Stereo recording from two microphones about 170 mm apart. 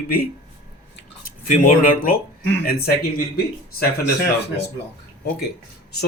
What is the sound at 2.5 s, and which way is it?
Speech, 65° left (ahead or behind).